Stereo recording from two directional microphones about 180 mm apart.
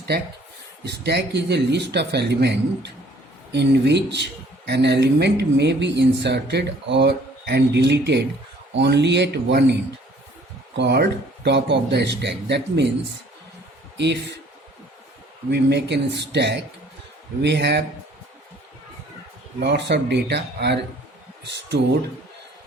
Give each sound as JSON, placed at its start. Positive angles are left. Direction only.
{"t": 0.9, "sound": "speech", "side_deg": -65}
{"t": 10.8, "sound": "speech", "side_deg": -65}
{"t": 13.9, "sound": "speech", "side_deg": -75}
{"t": 15.4, "sound": "speech", "side_deg": -70}
{"t": 19.5, "sound": "speech", "side_deg": -70}